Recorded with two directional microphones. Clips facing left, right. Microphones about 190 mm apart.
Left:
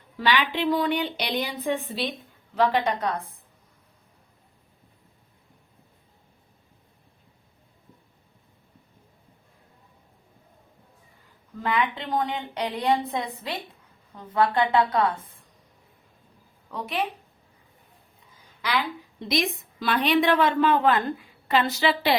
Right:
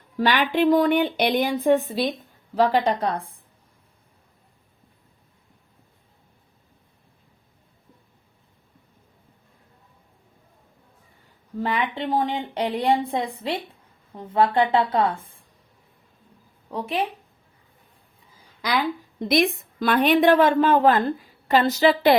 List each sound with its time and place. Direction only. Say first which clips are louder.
0.2 s a woman's voice: right 4 dB; 45° right (ahead or behind)
11.6 s speech: right 1 dB; 30° right (ahead or behind)
16.6 s speech: right 4 dB; 30° right (ahead or behind)
18.6 s a woman's voice: right 3 dB; 40° right (ahead or behind)